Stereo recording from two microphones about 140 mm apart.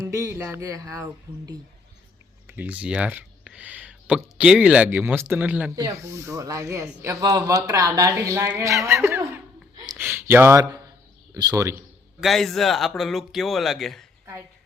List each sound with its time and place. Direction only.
0.1 s speech: 20° right (ahead or behind)
2.5 s speech: 10° right (ahead or behind)
5.7 s speech: 20° right (ahead or behind)
12.2 s speech: centre (ahead or behind)